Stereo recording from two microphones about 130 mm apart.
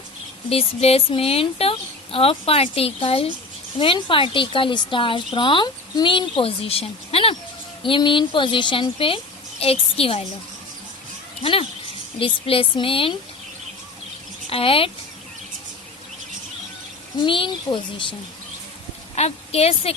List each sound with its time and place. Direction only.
0.5 s a woman's voice: 50° left (ahead or behind)
12.2 s speech: 45° left (ahead or behind)
14.5 s speech: 45° left (ahead or behind)
17.2 s a woman's voice: 40° left (ahead or behind)
19.1 s a woman's voice: 55° left (ahead or behind)